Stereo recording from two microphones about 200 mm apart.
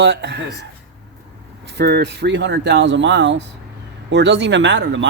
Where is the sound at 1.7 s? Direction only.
55° right (ahead or behind).